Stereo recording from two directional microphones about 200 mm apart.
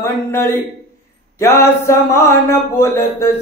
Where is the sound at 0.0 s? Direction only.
10° left (ahead or behind).